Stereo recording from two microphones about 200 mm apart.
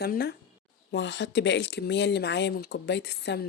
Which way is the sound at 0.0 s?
50° left (ahead or behind).